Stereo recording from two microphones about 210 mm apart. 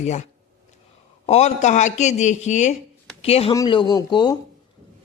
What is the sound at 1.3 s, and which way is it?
Speech, 30° left (ahead or behind).